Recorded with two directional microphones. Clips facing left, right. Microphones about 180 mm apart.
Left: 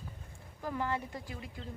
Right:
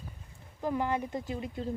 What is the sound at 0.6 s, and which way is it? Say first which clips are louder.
Speech: right 5 dB; 20° right (ahead or behind).